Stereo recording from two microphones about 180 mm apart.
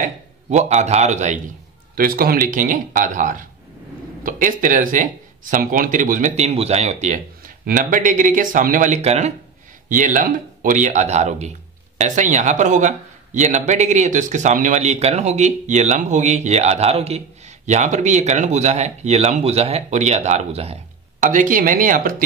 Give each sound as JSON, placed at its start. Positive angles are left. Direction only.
{"t": 0.0, "sound": "a man's voice", "side_deg": -40}
{"t": 2.0, "sound": "speech", "side_deg": -55}